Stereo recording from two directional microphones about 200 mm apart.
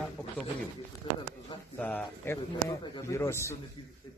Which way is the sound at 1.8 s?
5° left (ahead or behind).